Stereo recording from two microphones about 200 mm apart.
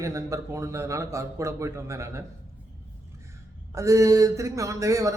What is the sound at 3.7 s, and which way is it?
A man's voice, 15° right (ahead or behind).